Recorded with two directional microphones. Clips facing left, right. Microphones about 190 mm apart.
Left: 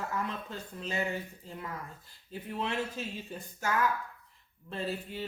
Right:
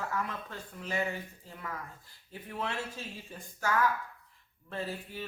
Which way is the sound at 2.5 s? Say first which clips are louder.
Left 3 dB; 20° left (ahead or behind).